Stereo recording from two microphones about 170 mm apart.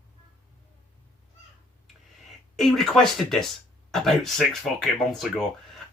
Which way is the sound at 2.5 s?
Centre (ahead or behind).